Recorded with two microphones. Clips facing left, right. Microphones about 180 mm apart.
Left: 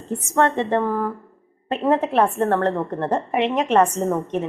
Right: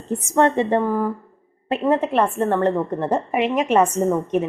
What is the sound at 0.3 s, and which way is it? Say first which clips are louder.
Speech: right 2 dB; 15° right (ahead or behind).